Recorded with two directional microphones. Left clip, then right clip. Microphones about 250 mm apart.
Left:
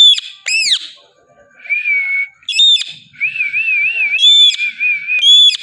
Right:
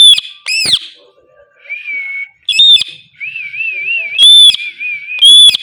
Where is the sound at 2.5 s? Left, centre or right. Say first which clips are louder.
Right 5 dB; centre.